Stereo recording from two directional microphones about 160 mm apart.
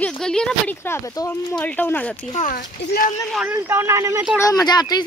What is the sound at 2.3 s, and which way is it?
Speech, 55° left (ahead or behind).